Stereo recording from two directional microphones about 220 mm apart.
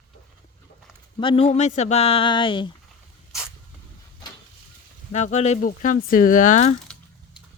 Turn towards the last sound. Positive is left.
turn(degrees=35)  # may be behind; listen again after turning